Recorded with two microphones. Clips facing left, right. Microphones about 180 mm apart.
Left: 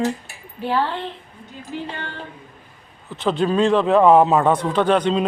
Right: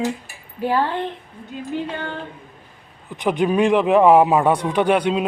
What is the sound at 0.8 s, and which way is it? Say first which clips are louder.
Speech: right 2 dB; 50° right (ahead or behind).